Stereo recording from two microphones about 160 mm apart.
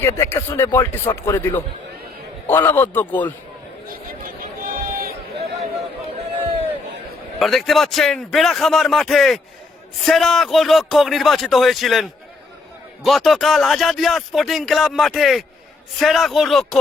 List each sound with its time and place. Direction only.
0.0 s speech: 15° left (ahead or behind)
3.8 s a sound: 60° right (ahead or behind)
7.3 s speech: centre (ahead or behind)
13.1 s speech: centre (ahead or behind)